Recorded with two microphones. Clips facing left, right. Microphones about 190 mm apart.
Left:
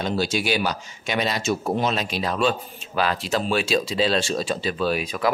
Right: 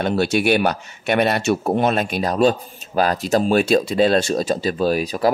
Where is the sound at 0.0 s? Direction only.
60° right (ahead or behind).